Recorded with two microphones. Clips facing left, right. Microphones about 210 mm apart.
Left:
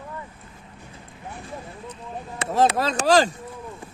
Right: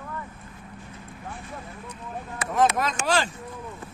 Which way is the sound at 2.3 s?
30° left (ahead or behind).